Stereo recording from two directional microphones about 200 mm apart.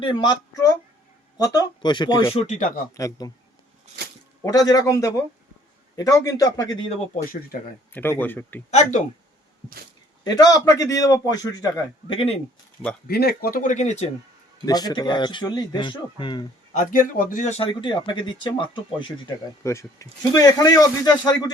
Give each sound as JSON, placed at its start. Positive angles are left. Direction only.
{"t": 0.0, "sound": "a man's voice", "side_deg": 25}
{"t": 4.4, "sound": "a man's voice", "side_deg": 20}
{"t": 7.5, "sound": "speech", "side_deg": 45}
{"t": 8.2, "sound": "a man's voice", "side_deg": 10}
{"t": 8.7, "sound": "speech", "side_deg": 35}
{"t": 10.2, "sound": "a man's voice", "side_deg": 20}
{"t": 13.1, "sound": "speech", "side_deg": 50}
{"t": 14.6, "sound": "a man's voice", "side_deg": 20}
{"t": 16.7, "sound": "a man's voice", "side_deg": 40}